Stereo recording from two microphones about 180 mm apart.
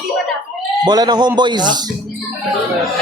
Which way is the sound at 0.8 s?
20° right (ahead or behind).